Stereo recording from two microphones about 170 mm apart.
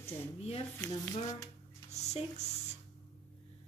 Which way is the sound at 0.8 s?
20° left (ahead or behind).